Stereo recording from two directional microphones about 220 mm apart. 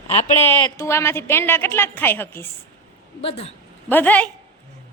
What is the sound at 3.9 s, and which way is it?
Speech, 5° left (ahead or behind).